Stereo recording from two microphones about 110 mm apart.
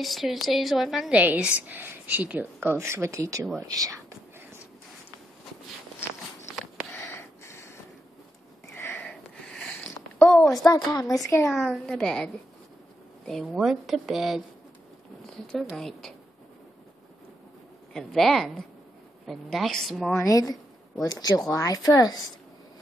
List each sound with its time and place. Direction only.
0.0 s a woman's voice: centre (ahead or behind); by 4.0 s 35° right (ahead or behind)
6.9 s a sound: 15° left (ahead or behind)
8.7 s sniff: 20° left (ahead or behind)
9.5 s a sound: 5° left (ahead or behind)
10.9 s speech: 35° left (ahead or behind)
11.5 s a woman's voice: centre (ahead or behind)
17.9 s a woman's voice: centre (ahead or behind)
20.2 s speech: 30° left (ahead or behind)